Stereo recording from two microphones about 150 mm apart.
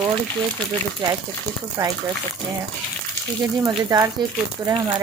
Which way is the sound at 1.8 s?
25° right (ahead or behind).